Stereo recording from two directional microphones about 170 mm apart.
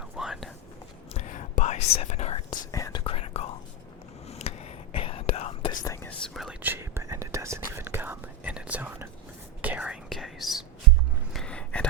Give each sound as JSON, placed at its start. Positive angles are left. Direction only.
{"t": 0.2, "sound": "whispering", "side_deg": 0}
{"t": 1.1, "sound": "whispering", "side_deg": 45}
{"t": 2.7, "sound": "whispering", "side_deg": 20}
{"t": 5.8, "sound": "whispering", "side_deg": 15}
{"t": 11.3, "sound": "a sound", "side_deg": 5}